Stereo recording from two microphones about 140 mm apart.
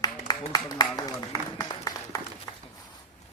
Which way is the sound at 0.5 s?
30° left (ahead or behind).